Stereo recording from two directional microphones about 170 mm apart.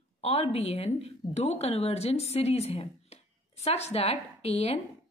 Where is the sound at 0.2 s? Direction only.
35° left (ahead or behind).